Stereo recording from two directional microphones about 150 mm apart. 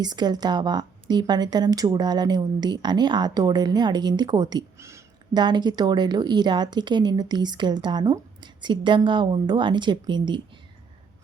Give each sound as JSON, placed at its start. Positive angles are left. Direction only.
{"t": 0.0, "sound": "a woman's voice", "side_deg": -30}